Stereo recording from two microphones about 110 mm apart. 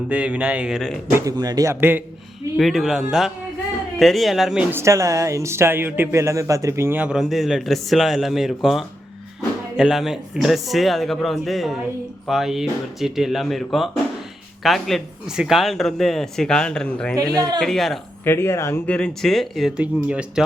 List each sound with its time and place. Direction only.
0.1 s a man's voice: 10° right (ahead or behind)
1.1 s speech: 35° right (ahead or behind)
1.7 s speech: 20° right (ahead or behind)
2.6 s speech: centre (ahead or behind)
4.7 s speech: 25° right (ahead or behind)
7.0 s speech: 5° right (ahead or behind)
18.3 s speech: 20° left (ahead or behind)
18.9 s speech: 10° left (ahead or behind)
19.7 s a man's voice: 10° right (ahead or behind)